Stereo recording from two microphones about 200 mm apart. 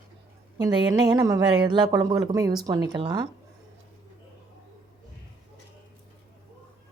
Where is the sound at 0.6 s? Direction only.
20° right (ahead or behind).